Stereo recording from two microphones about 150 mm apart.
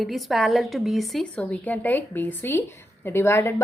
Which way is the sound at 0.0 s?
Centre (ahead or behind).